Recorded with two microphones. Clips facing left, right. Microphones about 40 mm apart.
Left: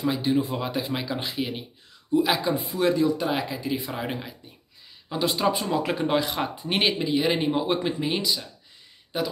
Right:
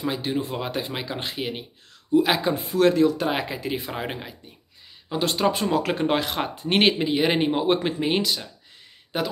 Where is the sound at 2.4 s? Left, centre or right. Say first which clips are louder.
Right 3 dB; right.